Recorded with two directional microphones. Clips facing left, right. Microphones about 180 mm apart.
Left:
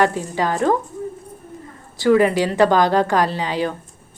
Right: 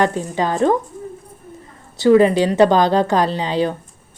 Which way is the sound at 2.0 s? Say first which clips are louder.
Right 3 dB; 20° right (ahead or behind).